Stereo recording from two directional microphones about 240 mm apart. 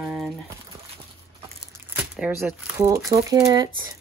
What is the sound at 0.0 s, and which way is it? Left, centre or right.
Crumpling, centre.